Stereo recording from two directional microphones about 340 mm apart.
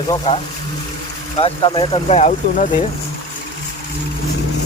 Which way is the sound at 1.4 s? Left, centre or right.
Centre.